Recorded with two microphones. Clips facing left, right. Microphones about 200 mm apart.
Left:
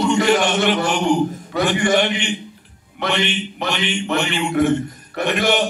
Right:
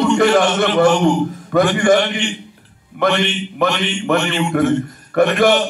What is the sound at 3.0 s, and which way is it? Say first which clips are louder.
A man's voice: right 5 dB; 50° right (ahead or behind).